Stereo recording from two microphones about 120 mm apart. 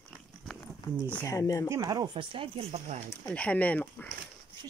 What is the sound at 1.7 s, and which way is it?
Speech, 30° right (ahead or behind).